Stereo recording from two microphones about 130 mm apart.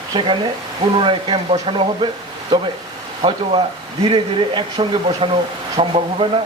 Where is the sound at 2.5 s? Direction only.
35° right (ahead or behind).